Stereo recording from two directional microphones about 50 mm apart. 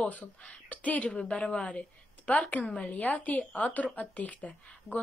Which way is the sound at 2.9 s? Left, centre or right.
Left.